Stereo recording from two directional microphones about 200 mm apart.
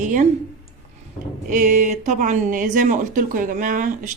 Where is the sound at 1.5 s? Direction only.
40° right (ahead or behind).